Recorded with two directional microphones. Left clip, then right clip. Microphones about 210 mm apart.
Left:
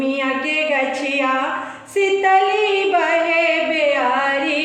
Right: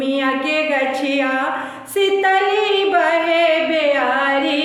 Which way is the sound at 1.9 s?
20° right (ahead or behind).